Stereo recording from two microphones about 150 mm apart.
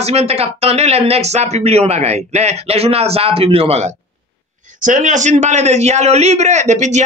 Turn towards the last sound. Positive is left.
turn(degrees=-50)  # may be behind; listen again after turning